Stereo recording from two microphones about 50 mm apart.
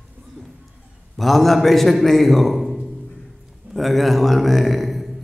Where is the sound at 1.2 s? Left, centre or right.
Centre.